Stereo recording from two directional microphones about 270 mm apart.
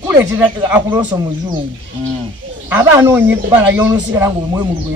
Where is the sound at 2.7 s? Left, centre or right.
Centre.